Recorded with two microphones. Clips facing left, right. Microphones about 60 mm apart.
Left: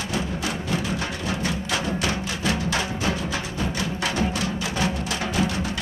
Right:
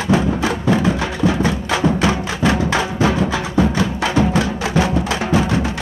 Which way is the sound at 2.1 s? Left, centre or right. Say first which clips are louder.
Right 8 dB; right.